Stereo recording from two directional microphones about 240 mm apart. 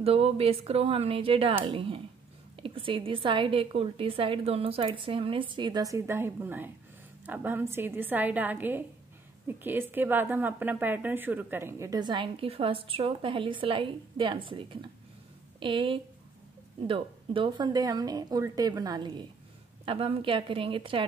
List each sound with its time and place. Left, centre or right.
0.0 s a woman's voice: right